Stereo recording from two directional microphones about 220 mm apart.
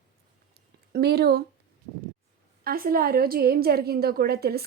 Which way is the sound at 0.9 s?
45° right (ahead or behind).